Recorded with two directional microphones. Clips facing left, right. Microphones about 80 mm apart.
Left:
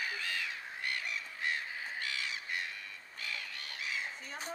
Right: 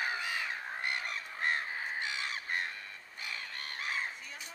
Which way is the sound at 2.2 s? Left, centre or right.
Right.